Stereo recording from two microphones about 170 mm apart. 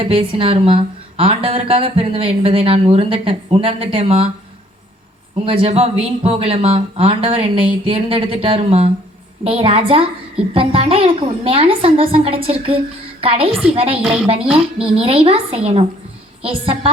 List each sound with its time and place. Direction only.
0.0 s a woman's voice: 35° right (ahead or behind)
5.5 s a woman's voice: 35° right (ahead or behind)
14.0 s a woman's voice: centre (ahead or behind)
14.8 s a woman's voice: 35° right (ahead or behind)